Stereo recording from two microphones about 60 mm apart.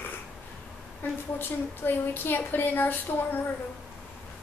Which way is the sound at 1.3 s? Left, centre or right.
Left.